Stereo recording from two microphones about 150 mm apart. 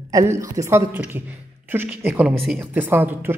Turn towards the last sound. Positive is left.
turn(degrees=-10)  # may be behind; listen again after turning